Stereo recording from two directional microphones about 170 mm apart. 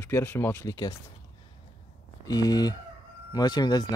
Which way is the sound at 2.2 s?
20° left (ahead or behind).